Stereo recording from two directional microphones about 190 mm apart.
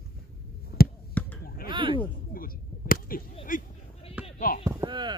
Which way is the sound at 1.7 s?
25° right (ahead or behind).